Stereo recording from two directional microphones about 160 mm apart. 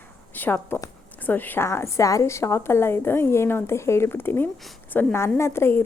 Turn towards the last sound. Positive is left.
turn(degrees=15)  # may be behind; listen again after turning